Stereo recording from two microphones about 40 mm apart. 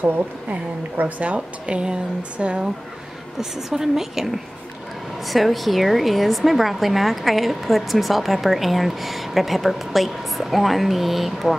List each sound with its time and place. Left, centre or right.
0.5 s a woman's voice: right
3.3 s a woman's voice: centre